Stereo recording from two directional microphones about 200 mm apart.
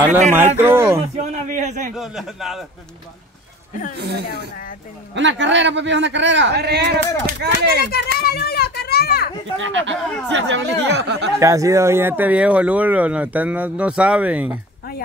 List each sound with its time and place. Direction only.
0.7 s a sound: 15° right (ahead or behind)
1.1 s a man's voice: 35° right (ahead or behind)
2.0 s speech: centre (ahead or behind)
4.0 s speech: 55° right (ahead or behind)
7.8 s a child's voice: 50° left (ahead or behind)
9.6 s speech: 65° right (ahead or behind)
11.3 s speech: 15° right (ahead or behind)